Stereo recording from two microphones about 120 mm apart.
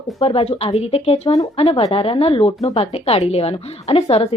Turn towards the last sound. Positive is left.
turn(degrees=55)  # may be behind; listen again after turning